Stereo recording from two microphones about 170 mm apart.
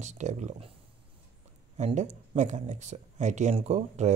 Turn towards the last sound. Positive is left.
turn(degrees=-40)  # may be behind; listen again after turning